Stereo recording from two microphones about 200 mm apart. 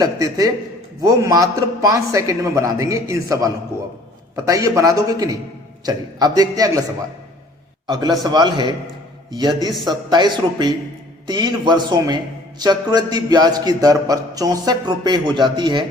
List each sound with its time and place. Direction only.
0.0 s a man's voice: 20° right (ahead or behind)
7.9 s a man's voice: 20° right (ahead or behind)